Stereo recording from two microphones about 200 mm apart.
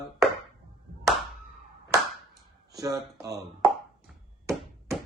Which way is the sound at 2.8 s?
15° right (ahead or behind).